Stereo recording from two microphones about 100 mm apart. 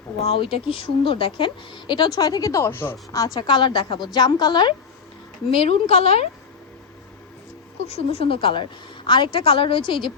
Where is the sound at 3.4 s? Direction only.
50° left (ahead or behind).